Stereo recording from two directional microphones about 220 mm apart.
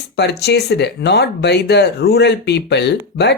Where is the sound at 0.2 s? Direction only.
50° left (ahead or behind).